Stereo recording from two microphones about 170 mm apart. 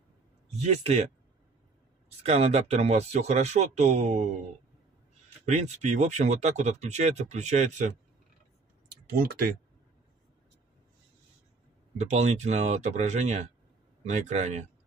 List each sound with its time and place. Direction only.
0.5 s speech: 40° right (ahead or behind)
2.0 s speech: 40° right (ahead or behind)
5.4 s speech: 40° right (ahead or behind)
8.8 s clicking: 60° right (ahead or behind)
12.0 s speech: 40° right (ahead or behind)